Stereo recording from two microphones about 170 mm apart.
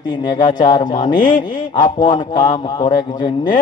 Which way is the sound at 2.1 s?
25° left (ahead or behind).